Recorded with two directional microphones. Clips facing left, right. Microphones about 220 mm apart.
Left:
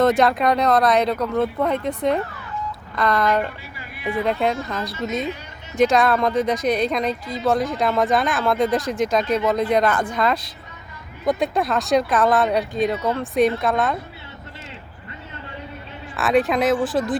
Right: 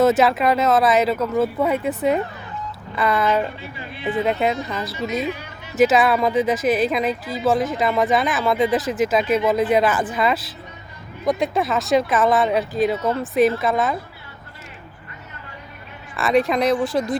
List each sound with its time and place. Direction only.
0.0 s speech: 5° right (ahead or behind)
3.8 s a sound: 25° right (ahead or behind)
4.3 s speech: 5° right (ahead or behind)
16.1 s speech: centre (ahead or behind)